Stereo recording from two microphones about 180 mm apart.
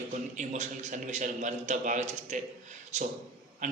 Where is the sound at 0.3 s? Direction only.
40° right (ahead or behind).